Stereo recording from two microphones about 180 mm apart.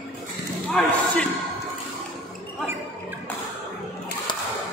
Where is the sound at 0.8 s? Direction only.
5° left (ahead or behind).